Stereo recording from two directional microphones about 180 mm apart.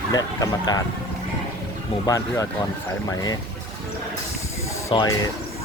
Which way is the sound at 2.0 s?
20° left (ahead or behind).